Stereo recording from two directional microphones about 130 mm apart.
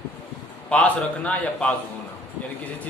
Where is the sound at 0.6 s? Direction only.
10° left (ahead or behind).